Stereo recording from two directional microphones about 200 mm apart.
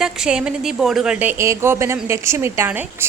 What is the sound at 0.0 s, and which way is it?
A woman's voice, 5° right (ahead or behind).